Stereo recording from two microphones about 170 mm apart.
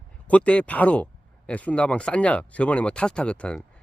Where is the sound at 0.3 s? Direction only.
10° left (ahead or behind).